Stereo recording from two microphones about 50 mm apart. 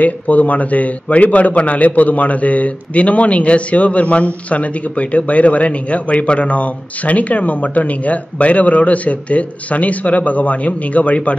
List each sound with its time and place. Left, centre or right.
0.0 s a man's voice: left